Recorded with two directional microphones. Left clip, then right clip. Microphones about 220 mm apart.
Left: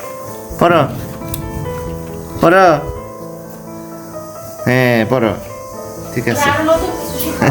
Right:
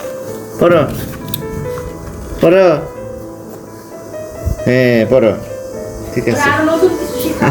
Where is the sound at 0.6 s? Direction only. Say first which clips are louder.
Right 1 dB; 40° left (ahead or behind).